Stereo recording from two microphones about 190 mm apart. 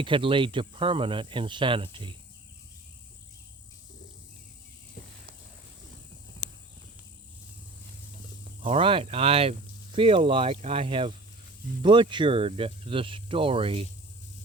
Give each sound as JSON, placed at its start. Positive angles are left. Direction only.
{"t": 0.0, "sound": "speech", "side_deg": -25}
{"t": 5.0, "sound": "a sound", "side_deg": 55}
{"t": 8.6, "sound": "speech", "side_deg": -30}